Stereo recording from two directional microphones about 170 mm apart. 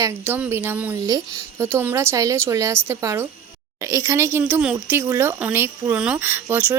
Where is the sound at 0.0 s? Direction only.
15° right (ahead or behind).